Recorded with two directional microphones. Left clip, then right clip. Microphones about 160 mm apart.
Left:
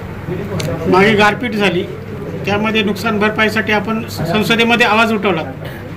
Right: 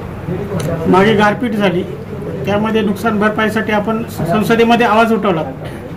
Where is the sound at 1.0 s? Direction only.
45° right (ahead or behind).